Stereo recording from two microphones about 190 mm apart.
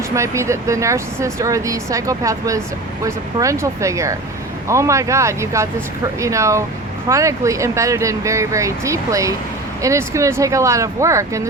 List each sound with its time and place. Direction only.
0.1 s speech: 15° right (ahead or behind)